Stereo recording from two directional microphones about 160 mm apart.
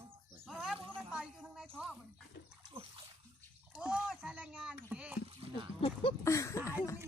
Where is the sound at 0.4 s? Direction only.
Centre (ahead or behind).